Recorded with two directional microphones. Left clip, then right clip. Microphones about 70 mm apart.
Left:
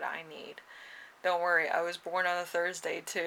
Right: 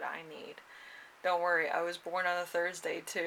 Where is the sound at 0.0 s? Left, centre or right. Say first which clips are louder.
Left 3 dB; left.